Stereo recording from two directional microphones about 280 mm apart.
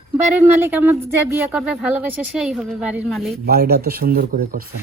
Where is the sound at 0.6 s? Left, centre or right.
Centre.